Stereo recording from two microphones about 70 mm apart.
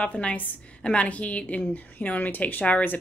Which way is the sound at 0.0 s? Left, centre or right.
Centre.